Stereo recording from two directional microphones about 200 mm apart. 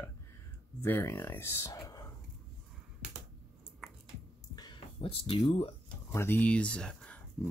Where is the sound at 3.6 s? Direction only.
Centre (ahead or behind).